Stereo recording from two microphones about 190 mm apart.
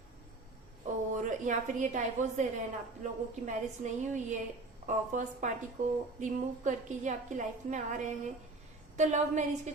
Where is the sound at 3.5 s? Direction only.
40° right (ahead or behind).